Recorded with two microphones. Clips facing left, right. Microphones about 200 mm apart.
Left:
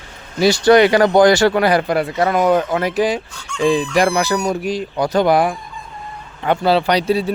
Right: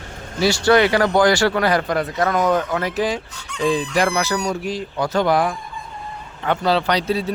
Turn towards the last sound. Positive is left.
turn(degrees=10)  # may be behind; listen again after turning